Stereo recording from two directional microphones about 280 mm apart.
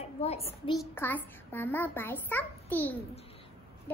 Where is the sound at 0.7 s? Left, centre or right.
Centre.